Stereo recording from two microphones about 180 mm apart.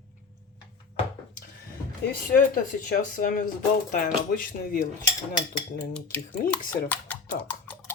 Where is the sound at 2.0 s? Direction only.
50° left (ahead or behind).